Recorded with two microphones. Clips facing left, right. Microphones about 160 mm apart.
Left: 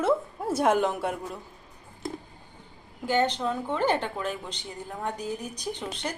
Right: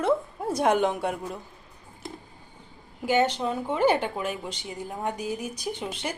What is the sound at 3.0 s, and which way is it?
A woman's voice, 10° right (ahead or behind).